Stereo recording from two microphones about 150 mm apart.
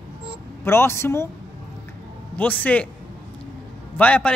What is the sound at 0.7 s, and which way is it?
Speech, 15° left (ahead or behind).